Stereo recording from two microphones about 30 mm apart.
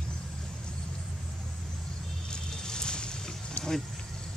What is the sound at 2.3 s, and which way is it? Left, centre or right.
Boat, left.